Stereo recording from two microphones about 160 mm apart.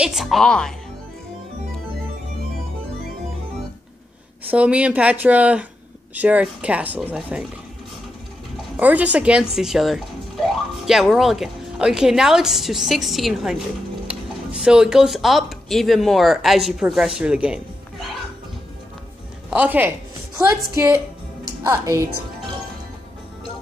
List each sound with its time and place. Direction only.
0.0 s speech: centre (ahead or behind)
4.5 s speech: 10° right (ahead or behind)
8.7 s speech: 10° right (ahead or behind)
19.5 s a woman's voice: 10° right (ahead or behind)